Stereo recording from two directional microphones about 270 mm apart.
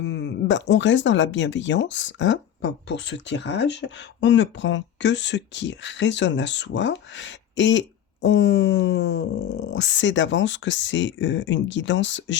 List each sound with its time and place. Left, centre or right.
0.0 s speech: left